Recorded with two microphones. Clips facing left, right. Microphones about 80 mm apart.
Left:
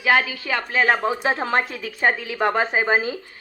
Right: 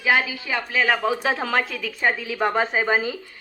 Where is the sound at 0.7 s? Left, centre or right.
Left.